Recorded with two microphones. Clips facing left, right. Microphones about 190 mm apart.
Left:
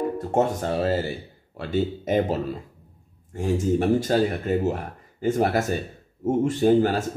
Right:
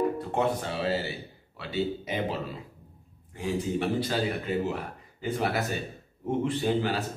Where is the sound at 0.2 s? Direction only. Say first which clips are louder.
Left 5 dB; 45° left (ahead or behind).